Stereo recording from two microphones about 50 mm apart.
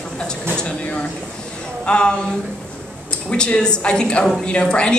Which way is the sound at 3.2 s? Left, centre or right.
Left.